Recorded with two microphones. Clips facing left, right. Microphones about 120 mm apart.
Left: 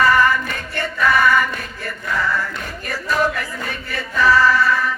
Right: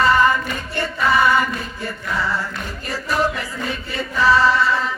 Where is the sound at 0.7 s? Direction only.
20° right (ahead or behind).